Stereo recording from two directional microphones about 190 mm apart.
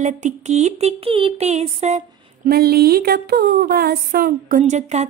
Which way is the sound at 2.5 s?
55° right (ahead or behind).